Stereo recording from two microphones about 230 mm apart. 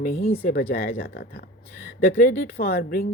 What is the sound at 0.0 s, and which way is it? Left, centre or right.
Speech, left.